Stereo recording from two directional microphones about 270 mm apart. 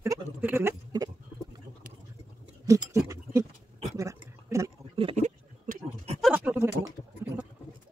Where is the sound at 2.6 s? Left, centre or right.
Centre.